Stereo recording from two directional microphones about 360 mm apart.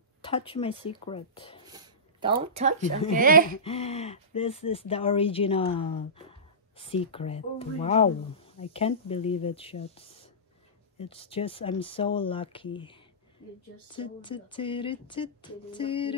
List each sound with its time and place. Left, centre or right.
0.2 s speech: centre
1.7 s a sound: centre
2.4 s speech: centre
3.6 s speech: centre
13.9 s speech: centre